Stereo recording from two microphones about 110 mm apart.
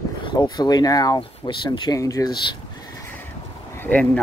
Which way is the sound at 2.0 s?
30° left (ahead or behind).